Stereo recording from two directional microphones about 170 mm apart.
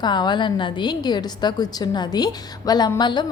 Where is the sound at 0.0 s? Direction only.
25° left (ahead or behind).